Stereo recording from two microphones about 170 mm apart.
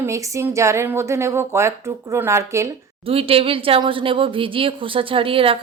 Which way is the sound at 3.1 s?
35° right (ahead or behind).